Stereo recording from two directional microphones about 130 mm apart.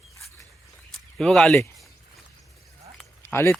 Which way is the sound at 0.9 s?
5° left (ahead or behind).